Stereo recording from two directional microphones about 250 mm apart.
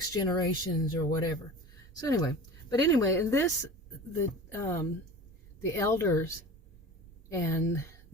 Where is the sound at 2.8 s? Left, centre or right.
Centre.